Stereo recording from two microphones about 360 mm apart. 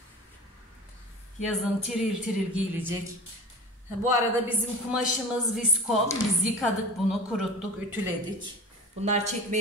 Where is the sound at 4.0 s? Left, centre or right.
Centre.